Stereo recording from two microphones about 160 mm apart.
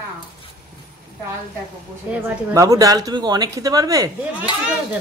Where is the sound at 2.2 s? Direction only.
20° right (ahead or behind).